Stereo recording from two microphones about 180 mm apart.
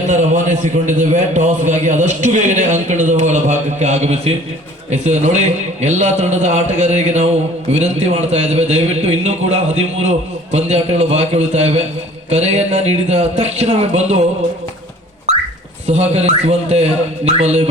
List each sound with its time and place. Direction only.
0.1 s a man's voice: 45° right (ahead or behind)
15.9 s a man's voice: 35° right (ahead or behind)